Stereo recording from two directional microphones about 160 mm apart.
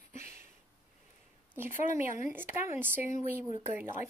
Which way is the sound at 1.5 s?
15° right (ahead or behind).